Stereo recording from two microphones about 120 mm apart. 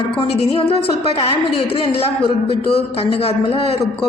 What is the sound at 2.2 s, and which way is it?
Speech, 50° left (ahead or behind).